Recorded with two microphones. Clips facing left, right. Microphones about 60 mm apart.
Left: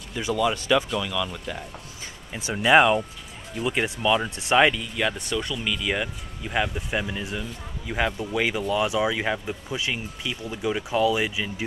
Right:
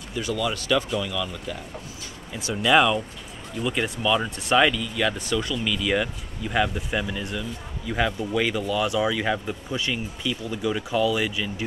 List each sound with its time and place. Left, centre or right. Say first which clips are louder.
0.2 s speech: left 3 dB; centre
0.8 s speech: even; centre
2.3 s speech: left 2 dB; left